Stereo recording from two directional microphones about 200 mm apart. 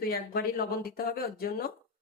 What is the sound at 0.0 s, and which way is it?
Speech, 50° left (ahead or behind).